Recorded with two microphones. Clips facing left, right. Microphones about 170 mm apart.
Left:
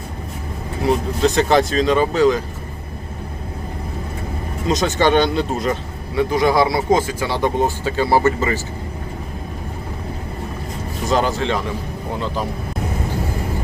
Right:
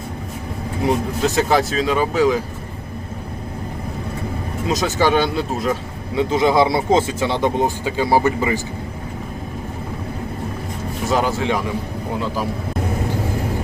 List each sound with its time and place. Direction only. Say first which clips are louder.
0.9 s speech: left 2 dB; 5° right (ahead or behind)
4.6 s speech: left 1 dB; 5° right (ahead or behind)
6.1 s speech: even; 20° right (ahead or behind)
11.1 s speech: left 1 dB; 10° right (ahead or behind)